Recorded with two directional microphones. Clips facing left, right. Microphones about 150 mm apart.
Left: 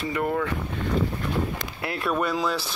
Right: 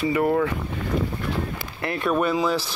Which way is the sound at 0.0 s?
5° right (ahead or behind).